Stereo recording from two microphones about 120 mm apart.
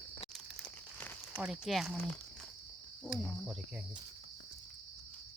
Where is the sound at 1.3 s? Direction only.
5° right (ahead or behind).